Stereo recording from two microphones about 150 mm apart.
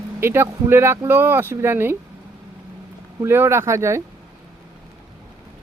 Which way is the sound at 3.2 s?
15° right (ahead or behind).